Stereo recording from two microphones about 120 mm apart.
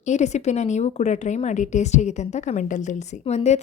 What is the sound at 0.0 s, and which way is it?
A woman's voice, 75° left (ahead or behind).